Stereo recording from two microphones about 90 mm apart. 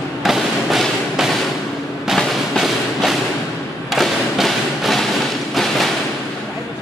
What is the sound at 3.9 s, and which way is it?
Thump, centre (ahead or behind).